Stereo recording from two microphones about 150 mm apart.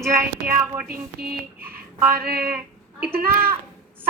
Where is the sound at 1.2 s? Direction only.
90° right.